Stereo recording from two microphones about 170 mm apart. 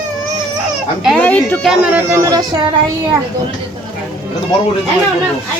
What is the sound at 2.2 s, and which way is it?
Music, 20° right (ahead or behind).